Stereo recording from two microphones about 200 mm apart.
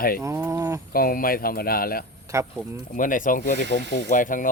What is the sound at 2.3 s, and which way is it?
Livestock, 15° right (ahead or behind).